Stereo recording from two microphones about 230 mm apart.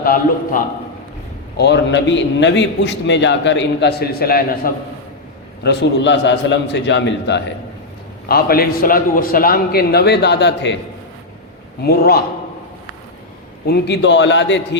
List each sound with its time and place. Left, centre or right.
0.0 s a man's voice: left
1.5 s a man's voice: left
5.6 s a man's voice: left
11.8 s a man's voice: left
13.7 s a man's voice: left